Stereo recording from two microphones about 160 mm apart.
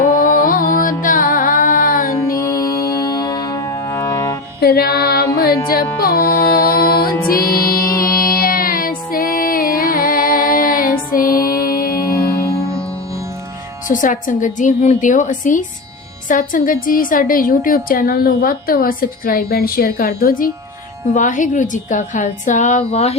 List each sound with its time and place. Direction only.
0.2 s music: 60° left (ahead or behind)
2.1 s music: 20° left (ahead or behind)
4.6 s music: 75° left (ahead or behind)
12.2 s music: 20° left (ahead or behind)
13.8 s a woman's voice: 55° left (ahead or behind)